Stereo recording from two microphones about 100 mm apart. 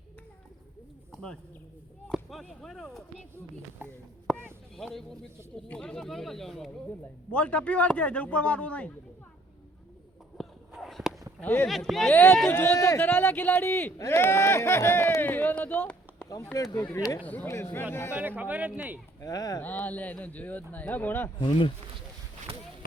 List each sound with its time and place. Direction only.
2.4 s speech: 5° left (ahead or behind)
4.3 s a sound: 5° right (ahead or behind)
4.8 s a man's voice: 5° left (ahead or behind)
10.4 s a sound: centre (ahead or behind)
11.6 s speech: centre (ahead or behind)
12.1 s speech: 20° left (ahead or behind)
16.5 s speech: 35° left (ahead or behind)
17.2 s a man's voice: 20° left (ahead or behind)
18.1 s speech: 15° right (ahead or behind)
19.2 s speech: 40° left (ahead or behind)
19.6 s a man's voice: 15° left (ahead or behind)
21.3 s speech: 55° left (ahead or behind)